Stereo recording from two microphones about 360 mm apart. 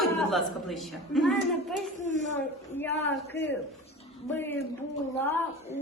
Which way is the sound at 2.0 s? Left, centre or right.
Centre.